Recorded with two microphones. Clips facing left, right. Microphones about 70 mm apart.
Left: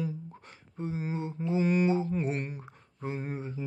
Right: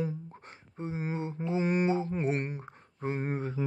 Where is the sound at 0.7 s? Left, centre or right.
Right.